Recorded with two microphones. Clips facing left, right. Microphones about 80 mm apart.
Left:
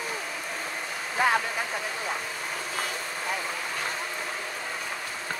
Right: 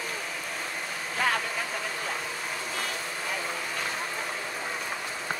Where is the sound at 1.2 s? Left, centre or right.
Centre.